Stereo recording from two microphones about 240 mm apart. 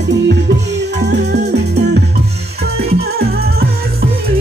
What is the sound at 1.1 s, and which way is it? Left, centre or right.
Music, right.